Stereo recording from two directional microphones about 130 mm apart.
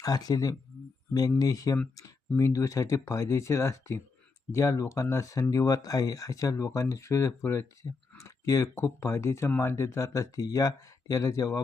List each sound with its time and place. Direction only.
0.0 s speech: 30° left (ahead or behind)